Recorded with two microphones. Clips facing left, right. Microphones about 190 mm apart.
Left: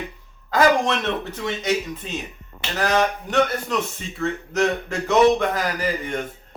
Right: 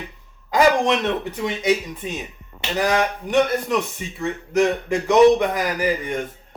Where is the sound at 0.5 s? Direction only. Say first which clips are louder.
Right 1 dB; 15° right (ahead or behind).